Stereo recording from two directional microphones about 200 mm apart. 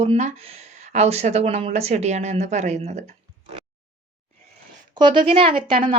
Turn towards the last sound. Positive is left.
turn(degrees=-25)  # may be behind; listen again after turning